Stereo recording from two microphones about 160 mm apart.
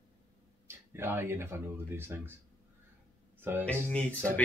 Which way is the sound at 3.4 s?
10° right (ahead or behind).